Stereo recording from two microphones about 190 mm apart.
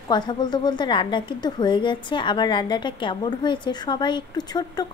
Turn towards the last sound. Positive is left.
turn(degrees=20)  # may be behind; listen again after turning